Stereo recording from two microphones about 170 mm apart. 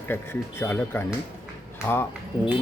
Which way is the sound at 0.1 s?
15° left (ahead or behind).